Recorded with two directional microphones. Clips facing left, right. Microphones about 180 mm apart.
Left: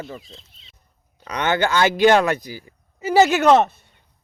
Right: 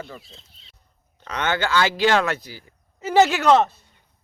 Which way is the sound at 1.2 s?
15° left (ahead or behind).